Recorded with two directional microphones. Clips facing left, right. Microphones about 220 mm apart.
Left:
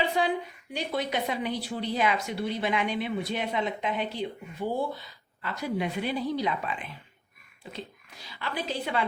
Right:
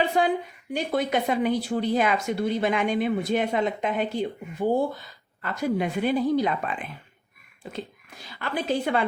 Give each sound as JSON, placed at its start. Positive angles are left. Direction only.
{"t": 0.1, "sound": "speech", "side_deg": -50}